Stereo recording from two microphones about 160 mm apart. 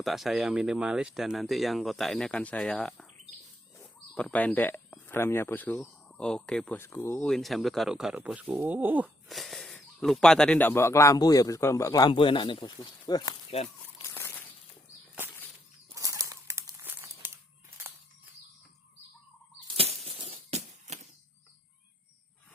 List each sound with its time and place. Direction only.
0.0 s speech: centre (ahead or behind)
4.1 s speech: 10° left (ahead or behind); by 9.0 s 10° right (ahead or behind)
9.3 s speech: centre (ahead or behind); by 13.3 s 25° left (ahead or behind)
13.5 s speech: 40° left (ahead or behind)
14.1 s crumpling: 15° left (ahead or behind)
16.0 s crumpling: 20° right (ahead or behind)
19.6 s a sound: 35° right (ahead or behind)